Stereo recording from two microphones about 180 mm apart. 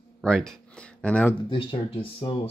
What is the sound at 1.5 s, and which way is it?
Speech, 30° left (ahead or behind).